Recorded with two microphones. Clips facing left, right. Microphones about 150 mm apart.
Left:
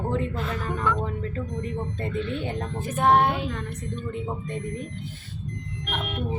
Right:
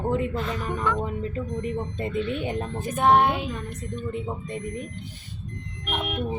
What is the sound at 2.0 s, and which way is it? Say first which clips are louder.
Speech: right 2 dB; 15° right (ahead or behind).